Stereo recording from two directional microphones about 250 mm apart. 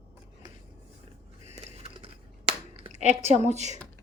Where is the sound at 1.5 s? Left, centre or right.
Right.